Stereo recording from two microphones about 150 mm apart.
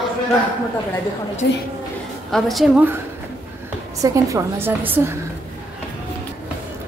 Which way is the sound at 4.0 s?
20° right (ahead or behind).